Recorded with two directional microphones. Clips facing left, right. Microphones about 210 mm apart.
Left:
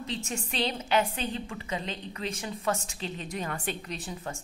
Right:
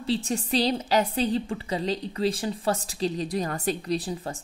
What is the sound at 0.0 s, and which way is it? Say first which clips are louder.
A woman's voice: right 8 dB; 35° right (ahead or behind).